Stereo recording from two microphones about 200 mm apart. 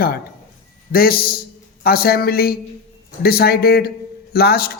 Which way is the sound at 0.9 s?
50° left (ahead or behind).